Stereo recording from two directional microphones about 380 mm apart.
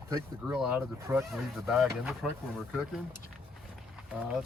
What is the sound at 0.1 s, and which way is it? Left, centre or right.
Speech, centre.